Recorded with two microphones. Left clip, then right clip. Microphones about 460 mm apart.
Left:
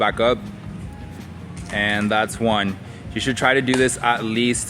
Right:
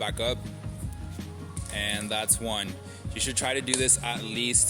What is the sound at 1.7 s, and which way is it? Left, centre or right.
Speech, right.